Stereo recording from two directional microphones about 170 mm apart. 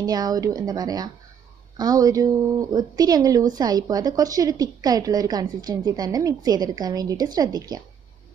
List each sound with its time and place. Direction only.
0.0 s a woman's voice: 20° right (ahead or behind)